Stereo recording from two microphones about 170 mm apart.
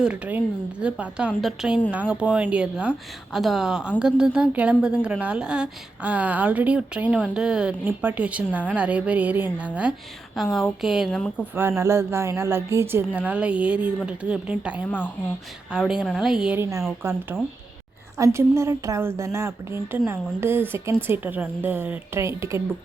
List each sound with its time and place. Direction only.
0.0 s a woman's voice: 10° right (ahead or behind)
11.5 s a woman's voice: 15° right (ahead or behind)
16.6 s a woman's voice: 15° right (ahead or behind)